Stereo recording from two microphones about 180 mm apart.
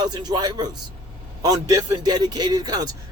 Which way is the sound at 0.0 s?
25° right (ahead or behind).